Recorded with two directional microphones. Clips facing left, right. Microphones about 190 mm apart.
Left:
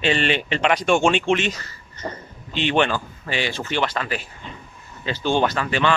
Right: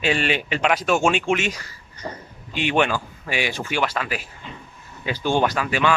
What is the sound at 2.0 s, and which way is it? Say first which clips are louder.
Speech: left 2 dB; 50° left (ahead or behind).